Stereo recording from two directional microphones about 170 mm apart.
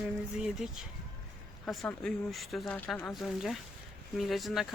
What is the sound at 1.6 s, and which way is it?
A woman's voice, centre (ahead or behind).